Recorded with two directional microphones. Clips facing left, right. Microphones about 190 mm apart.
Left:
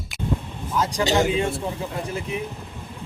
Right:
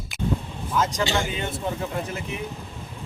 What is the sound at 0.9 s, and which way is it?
Speech, 35° left (ahead or behind).